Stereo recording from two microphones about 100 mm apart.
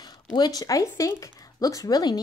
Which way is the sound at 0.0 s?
45° left (ahead or behind).